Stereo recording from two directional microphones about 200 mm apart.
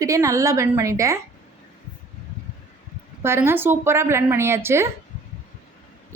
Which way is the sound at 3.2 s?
10° right (ahead or behind).